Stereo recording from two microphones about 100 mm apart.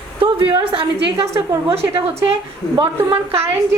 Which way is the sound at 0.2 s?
65° right (ahead or behind).